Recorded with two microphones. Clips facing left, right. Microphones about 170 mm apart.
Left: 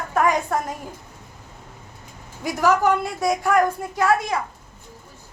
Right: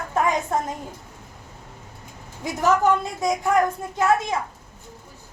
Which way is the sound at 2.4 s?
20° right (ahead or behind).